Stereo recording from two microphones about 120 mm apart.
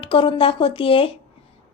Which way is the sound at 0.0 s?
45° left (ahead or behind).